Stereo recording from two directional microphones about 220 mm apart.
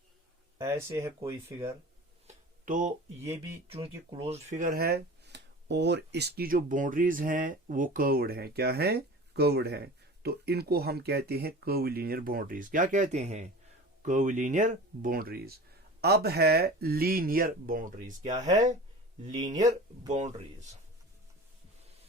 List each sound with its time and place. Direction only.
0.6 s speech: 10° right (ahead or behind)
2.2 s a sound: 35° right (ahead or behind)
3.7 s speech: 25° right (ahead or behind)